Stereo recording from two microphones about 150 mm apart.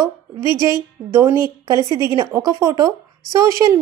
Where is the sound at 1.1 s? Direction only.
20° right (ahead or behind).